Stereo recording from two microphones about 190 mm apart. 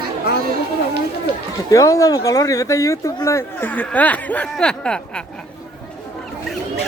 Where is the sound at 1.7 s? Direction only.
15° left (ahead or behind).